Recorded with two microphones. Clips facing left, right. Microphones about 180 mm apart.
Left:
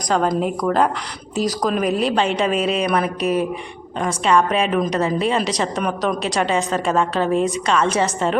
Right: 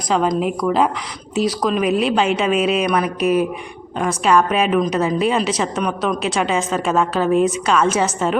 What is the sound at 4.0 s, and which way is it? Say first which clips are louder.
A woman's voice: right 1 dB; 5° right (ahead or behind).